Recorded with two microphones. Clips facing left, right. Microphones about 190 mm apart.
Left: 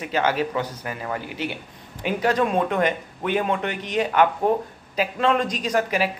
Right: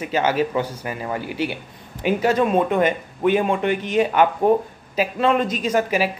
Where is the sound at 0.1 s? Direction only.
5° right (ahead or behind).